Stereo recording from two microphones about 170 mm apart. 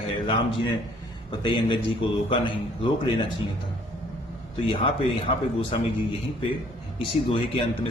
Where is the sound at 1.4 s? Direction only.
30° left (ahead or behind).